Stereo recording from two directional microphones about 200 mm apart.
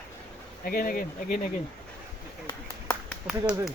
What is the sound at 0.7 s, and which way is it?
Speech, 45° left (ahead or behind).